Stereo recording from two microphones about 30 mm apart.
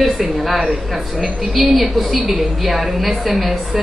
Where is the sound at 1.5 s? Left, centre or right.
Centre.